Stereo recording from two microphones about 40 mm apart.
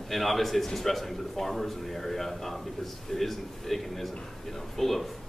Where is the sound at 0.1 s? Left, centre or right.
Centre.